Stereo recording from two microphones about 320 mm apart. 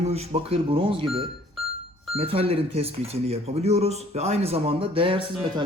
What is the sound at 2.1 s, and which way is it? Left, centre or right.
Speech, centre.